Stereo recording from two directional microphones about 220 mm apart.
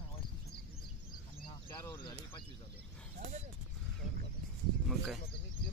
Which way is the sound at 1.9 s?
20° left (ahead or behind).